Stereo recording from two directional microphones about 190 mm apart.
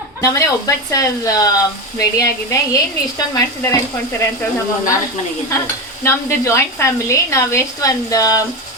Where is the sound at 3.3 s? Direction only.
20° left (ahead or behind).